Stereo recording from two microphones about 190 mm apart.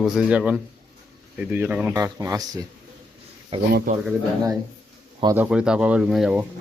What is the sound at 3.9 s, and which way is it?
Speech, 45° right (ahead or behind).